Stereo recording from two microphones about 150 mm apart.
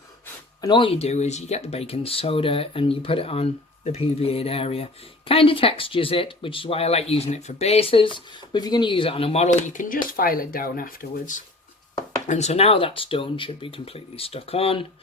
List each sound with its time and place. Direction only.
0.6 s speech: 30° left (ahead or behind); by 11.4 s 65° left (ahead or behind)
12.3 s speech: 50° left (ahead or behind)